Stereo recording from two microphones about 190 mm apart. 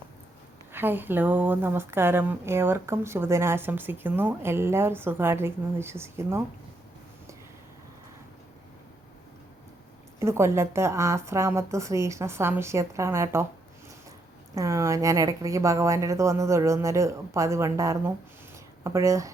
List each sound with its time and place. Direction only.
0.7 s speech: 10° right (ahead or behind)
10.2 s speech: 15° right (ahead or behind)
14.5 s speech: 15° right (ahead or behind)